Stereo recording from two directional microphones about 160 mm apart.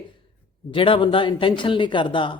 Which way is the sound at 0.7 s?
35° left (ahead or behind).